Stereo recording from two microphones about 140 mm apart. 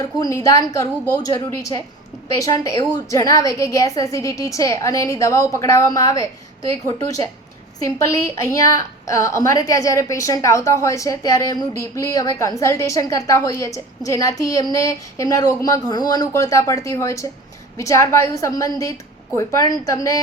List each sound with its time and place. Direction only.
0.0 s a woman's voice: 20° left (ahead or behind)
7.9 s a woman's voice: 20° left (ahead or behind)